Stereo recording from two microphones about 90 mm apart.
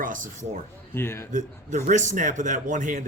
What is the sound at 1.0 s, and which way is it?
Speech, 25° left (ahead or behind).